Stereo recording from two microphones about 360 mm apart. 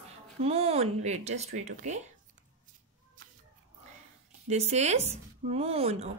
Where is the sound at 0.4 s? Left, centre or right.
Centre.